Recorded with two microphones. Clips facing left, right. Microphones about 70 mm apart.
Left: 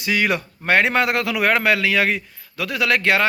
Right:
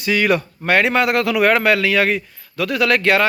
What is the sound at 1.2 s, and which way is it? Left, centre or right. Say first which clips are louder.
A man's voice: right 4 dB; centre.